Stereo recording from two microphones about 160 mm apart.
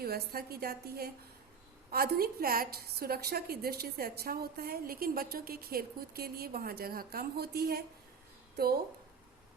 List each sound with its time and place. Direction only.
0.0 s a woman's voice: 70° right (ahead or behind)